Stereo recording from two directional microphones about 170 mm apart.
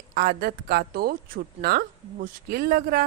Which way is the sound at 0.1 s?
65° right (ahead or behind).